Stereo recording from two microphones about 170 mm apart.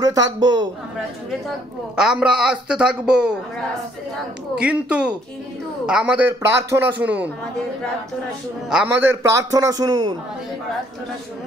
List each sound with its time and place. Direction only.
0.0 s a woman's voice: 20° right (ahead or behind)
2.0 s a woman's voice: 5° right (ahead or behind)
4.6 s a man's voice: 5° right (ahead or behind)
8.6 s a man's voice: 5° right (ahead or behind); by 10.1 s 25° right (ahead or behind)